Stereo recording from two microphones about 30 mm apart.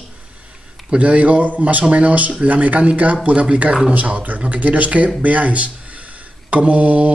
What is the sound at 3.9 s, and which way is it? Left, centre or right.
Speech, right.